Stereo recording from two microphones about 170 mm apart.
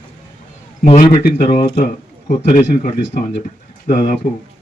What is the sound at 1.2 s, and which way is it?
A man's voice, 55° left (ahead or behind).